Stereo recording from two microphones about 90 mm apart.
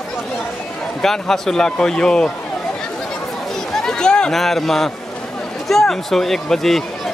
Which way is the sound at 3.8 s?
10° left (ahead or behind).